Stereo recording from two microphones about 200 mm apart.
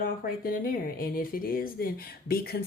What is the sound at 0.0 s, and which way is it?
Speech, 45° left (ahead or behind).